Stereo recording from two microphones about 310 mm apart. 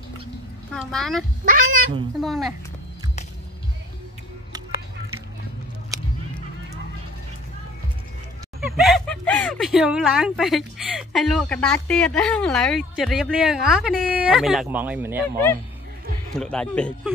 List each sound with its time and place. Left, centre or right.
0.7 s speech: centre
1.4 s speech: right
2.1 s speech: centre
8.5 s speech: centre
16.3 s speech: centre